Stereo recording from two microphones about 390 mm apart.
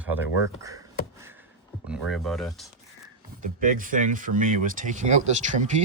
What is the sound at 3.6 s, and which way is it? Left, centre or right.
Speech, right.